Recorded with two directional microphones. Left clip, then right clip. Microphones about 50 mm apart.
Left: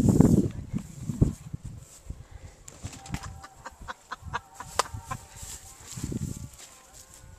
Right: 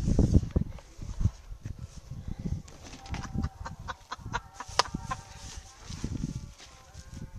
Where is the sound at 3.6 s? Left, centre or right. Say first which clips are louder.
Even; right.